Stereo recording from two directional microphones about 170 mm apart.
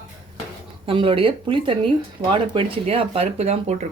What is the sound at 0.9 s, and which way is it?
Speech, 30° right (ahead or behind).